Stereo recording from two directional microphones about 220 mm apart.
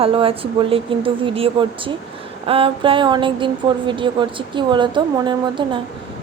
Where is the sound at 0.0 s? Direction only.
25° right (ahead or behind).